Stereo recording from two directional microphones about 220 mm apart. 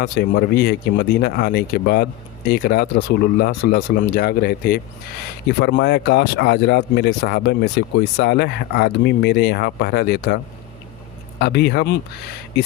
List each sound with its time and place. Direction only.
0.0 s speech: 45° left (ahead or behind)
11.3 s speech: 50° left (ahead or behind)